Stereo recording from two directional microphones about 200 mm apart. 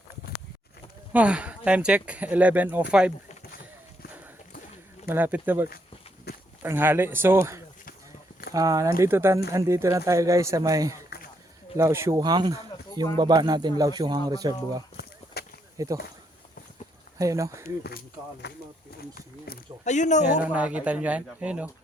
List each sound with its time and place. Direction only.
1.1 s speech: 5° right (ahead or behind)
5.0 s speech: 10° right (ahead or behind)
6.3 s a sound: 55° left (ahead or behind)
6.6 s speech: 10° right (ahead or behind)
15.3 s a sound: 50° left (ahead or behind)
15.8 s speech: 15° right (ahead or behind)
17.2 s speech: 15° right (ahead or behind)
18.4 s speech: 60° left (ahead or behind)
19.8 s speech: 35° left (ahead or behind)
20.4 s speech: 5° right (ahead or behind)